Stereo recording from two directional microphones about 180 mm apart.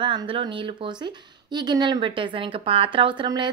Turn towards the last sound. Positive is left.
turn(degrees=-25)  # may be behind; listen again after turning